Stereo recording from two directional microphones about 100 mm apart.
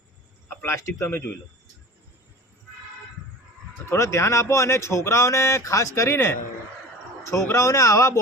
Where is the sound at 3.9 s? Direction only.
30° left (ahead or behind).